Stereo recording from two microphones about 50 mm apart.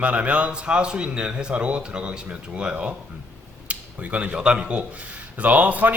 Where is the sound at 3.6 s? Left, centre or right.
Right.